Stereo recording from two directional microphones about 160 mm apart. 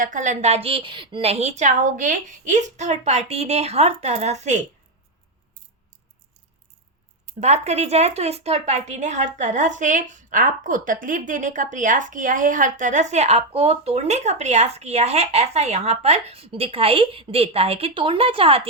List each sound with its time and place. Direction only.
0.0 s a woman's voice: 55° right (ahead or behind)
7.3 s a woman's voice: 45° right (ahead or behind)